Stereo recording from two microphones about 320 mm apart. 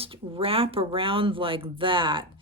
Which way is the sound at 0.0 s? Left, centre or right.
Centre.